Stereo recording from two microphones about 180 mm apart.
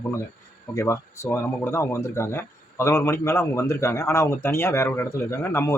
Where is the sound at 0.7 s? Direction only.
15° left (ahead or behind).